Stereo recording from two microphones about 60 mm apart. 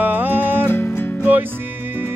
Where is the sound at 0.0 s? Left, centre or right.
Right.